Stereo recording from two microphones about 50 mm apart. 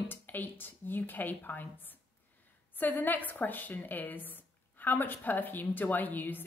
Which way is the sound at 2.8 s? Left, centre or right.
Left.